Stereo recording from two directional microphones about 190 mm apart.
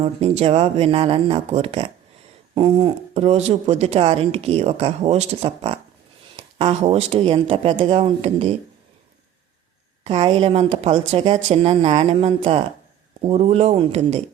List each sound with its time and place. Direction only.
0.0 s speech: 35° right (ahead or behind)
10.0 s speech: 30° right (ahead or behind)